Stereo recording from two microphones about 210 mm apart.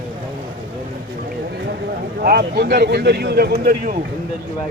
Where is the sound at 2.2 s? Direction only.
45° right (ahead or behind).